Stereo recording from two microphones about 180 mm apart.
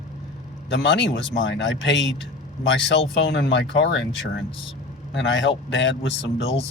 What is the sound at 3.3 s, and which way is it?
Speech, 80° left.